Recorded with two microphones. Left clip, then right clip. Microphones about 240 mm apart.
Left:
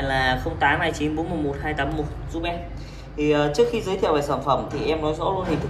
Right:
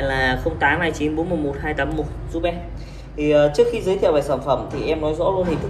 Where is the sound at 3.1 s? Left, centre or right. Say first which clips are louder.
Right 5 dB; centre.